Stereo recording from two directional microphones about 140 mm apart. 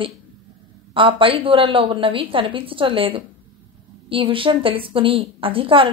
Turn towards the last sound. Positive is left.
turn(degrees=-40)  # may be behind; listen again after turning